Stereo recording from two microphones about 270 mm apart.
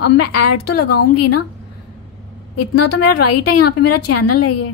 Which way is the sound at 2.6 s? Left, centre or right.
Left.